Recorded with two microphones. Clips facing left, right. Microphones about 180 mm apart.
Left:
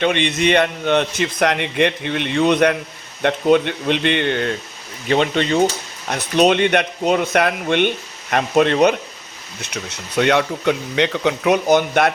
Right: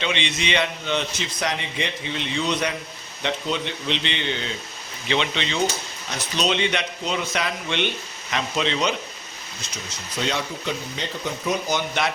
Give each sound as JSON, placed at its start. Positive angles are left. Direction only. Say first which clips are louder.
{"t": 0.0, "sound": "speech", "louder": "left 9 dB", "side_deg": 55}
{"t": 9.6, "sound": "speech", "louder": "left 8 dB", "side_deg": 65}